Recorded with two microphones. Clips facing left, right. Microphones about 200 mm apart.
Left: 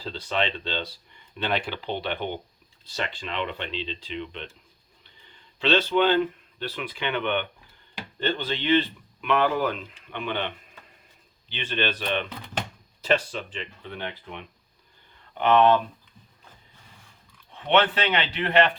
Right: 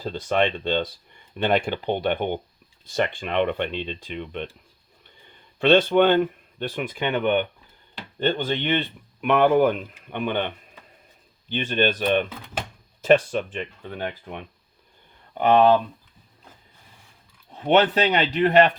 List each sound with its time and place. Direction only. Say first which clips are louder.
0.0 s speech: right 5 dB; 50° right (ahead or behind); by 15.8 s 35° right (ahead or behind)
17.5 s speech: right 4 dB; 40° right (ahead or behind)